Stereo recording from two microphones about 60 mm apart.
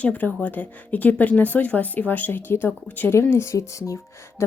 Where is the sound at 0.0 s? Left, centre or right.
Left.